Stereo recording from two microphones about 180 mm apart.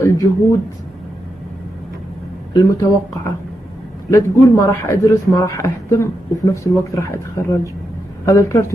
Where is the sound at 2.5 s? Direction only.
20° left (ahead or behind).